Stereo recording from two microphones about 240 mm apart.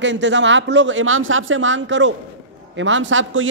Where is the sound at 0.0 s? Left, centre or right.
Right.